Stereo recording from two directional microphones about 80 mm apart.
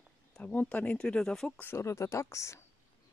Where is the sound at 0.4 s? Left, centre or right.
Centre.